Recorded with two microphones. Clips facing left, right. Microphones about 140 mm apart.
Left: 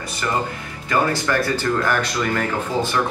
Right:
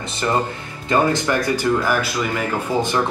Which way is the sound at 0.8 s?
20° right (ahead or behind).